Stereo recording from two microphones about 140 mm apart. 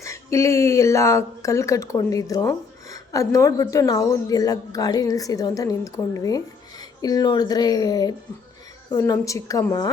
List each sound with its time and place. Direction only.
0.0 s speech: 20° left (ahead or behind)